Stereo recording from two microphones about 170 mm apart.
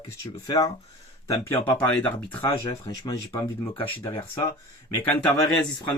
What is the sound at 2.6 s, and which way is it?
Speech, 25° left (ahead or behind).